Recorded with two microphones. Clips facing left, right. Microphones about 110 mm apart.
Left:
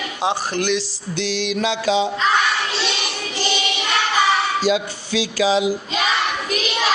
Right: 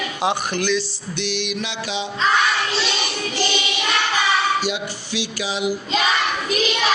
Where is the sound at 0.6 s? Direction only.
55° left (ahead or behind).